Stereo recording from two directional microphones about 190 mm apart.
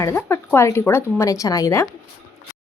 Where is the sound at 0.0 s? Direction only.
15° left (ahead or behind).